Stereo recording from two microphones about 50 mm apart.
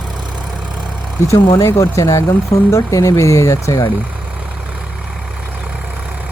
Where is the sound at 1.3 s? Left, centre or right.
Left.